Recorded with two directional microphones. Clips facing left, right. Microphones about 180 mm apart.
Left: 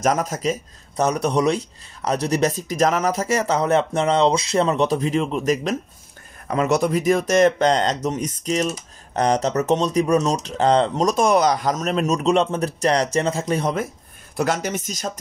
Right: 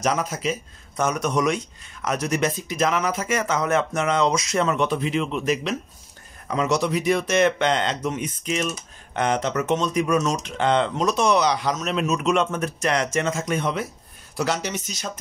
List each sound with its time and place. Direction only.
0.0 s speech: 45° left (ahead or behind)
6.4 s speech: 55° left (ahead or behind); by 13.8 s 40° left (ahead or behind)
14.3 s speech: 50° left (ahead or behind)